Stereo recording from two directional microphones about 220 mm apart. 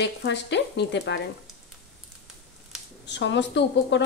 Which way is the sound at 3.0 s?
55° left (ahead or behind).